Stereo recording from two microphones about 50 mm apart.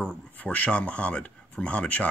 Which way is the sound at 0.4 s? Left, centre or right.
Left.